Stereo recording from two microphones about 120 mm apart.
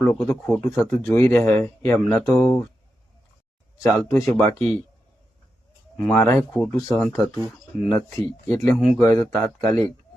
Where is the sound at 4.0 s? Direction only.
25° left (ahead or behind).